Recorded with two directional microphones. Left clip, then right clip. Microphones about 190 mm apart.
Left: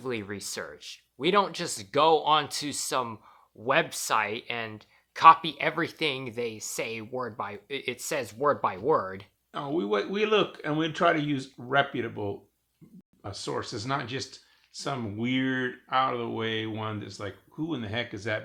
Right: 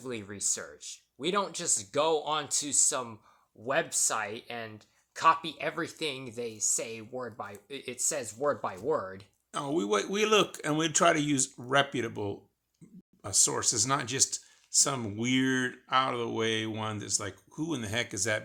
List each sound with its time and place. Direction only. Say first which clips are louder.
0.0 s speech: left 3 dB; 15° left (ahead or behind)
9.5 s speech: left 1 dB; 50° right (ahead or behind)